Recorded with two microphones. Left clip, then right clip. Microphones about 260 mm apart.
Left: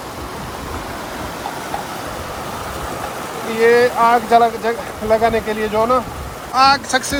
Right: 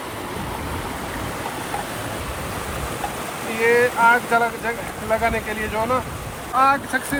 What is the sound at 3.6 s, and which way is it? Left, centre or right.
Speech, left.